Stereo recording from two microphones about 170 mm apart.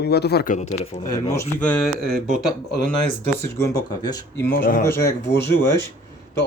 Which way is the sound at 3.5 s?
20° left (ahead or behind).